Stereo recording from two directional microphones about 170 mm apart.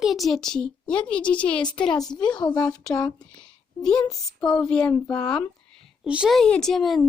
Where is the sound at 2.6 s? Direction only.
5° left (ahead or behind).